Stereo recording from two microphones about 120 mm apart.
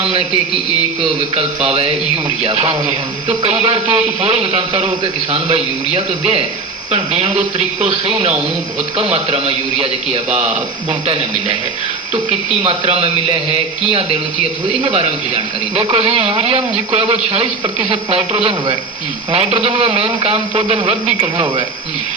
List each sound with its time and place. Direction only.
0.0 s speech: 55° right (ahead or behind)
1.4 s a man's voice: 55° right (ahead or behind)
9.1 s a man's voice: 55° right (ahead or behind)
10.8 s speech: 55° right (ahead or behind)
12.3 s a man's voice: 65° right (ahead or behind)
14.8 s speech: 50° right (ahead or behind)